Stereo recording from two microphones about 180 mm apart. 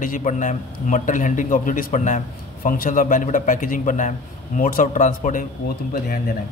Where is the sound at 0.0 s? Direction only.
45° left (ahead or behind).